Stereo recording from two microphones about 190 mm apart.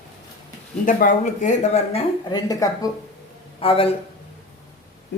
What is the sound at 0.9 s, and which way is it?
Speech, 45° left (ahead or behind).